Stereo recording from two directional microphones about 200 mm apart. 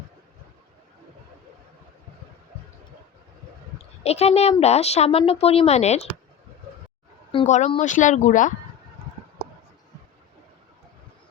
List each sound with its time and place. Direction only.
4.0 s speech: 30° left (ahead or behind)
7.3 s speech: 30° left (ahead or behind)